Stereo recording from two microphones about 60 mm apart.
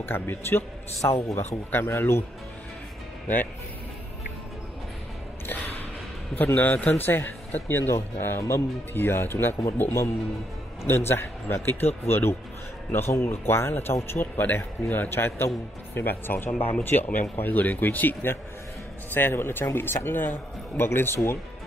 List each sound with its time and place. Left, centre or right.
0.0 s a man's voice: left
6.3 s a man's voice: left